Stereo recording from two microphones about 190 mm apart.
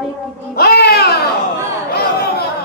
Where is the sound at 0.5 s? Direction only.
55° left (ahead or behind).